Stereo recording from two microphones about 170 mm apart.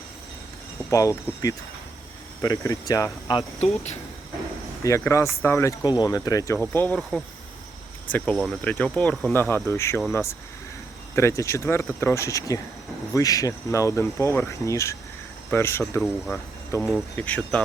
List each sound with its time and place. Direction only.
0.9 s speech: 20° left (ahead or behind)
3.6 s speech: 40° left (ahead or behind)
4.8 s speech: 15° left (ahead or behind)
16.0 s speech: centre (ahead or behind)